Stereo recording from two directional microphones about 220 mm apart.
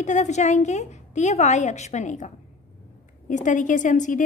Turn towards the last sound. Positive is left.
turn(degrees=35)  # may be behind; listen again after turning